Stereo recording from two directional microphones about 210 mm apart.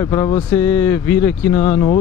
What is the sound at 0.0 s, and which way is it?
Speech, 15° left (ahead or behind).